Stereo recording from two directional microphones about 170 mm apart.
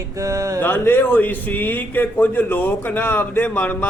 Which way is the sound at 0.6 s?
15° left (ahead or behind).